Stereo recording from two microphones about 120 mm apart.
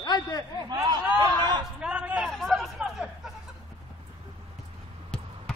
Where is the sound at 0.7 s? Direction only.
35° right (ahead or behind).